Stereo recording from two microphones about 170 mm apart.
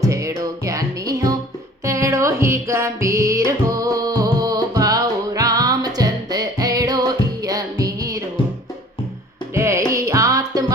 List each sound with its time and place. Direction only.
0.0 s music: 20° right (ahead or behind)
9.6 s music: 15° right (ahead or behind)